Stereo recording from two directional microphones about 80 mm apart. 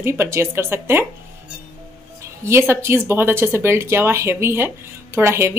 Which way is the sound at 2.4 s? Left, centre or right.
Right.